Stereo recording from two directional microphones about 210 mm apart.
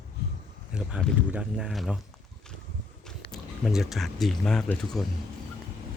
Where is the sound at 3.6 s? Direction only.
Centre (ahead or behind).